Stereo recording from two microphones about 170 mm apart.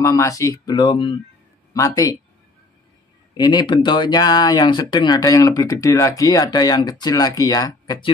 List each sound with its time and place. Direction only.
0.0 s speech: 20° left (ahead or behind)
3.3 s speech: 25° left (ahead or behind)